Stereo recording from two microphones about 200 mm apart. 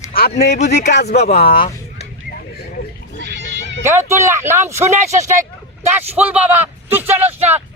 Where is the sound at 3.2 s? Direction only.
65° right (ahead or behind).